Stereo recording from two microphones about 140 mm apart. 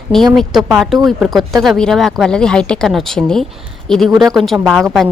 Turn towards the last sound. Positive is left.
turn(degrees=0)  # may be behind; listen again after turning